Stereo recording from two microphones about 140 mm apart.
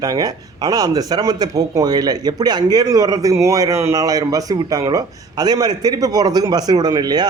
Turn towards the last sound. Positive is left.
turn(degrees=-30)  # may be behind; listen again after turning